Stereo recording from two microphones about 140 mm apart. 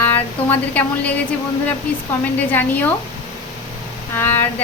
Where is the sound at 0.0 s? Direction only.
15° left (ahead or behind).